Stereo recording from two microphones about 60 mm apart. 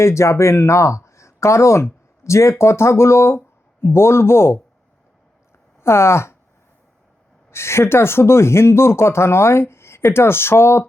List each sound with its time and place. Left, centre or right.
0.0 s speech: left
5.8 s speech: left
7.5 s speech: left